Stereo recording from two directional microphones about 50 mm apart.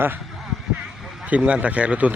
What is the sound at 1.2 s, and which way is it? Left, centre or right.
Speech, right.